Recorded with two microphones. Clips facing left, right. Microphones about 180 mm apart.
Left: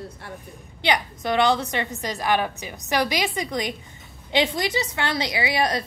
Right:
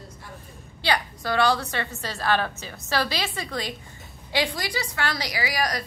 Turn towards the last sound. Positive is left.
turn(degrees=25)  # may be behind; listen again after turning